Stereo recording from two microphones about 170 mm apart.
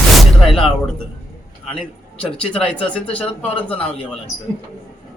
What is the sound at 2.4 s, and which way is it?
Speech, 5° left (ahead or behind).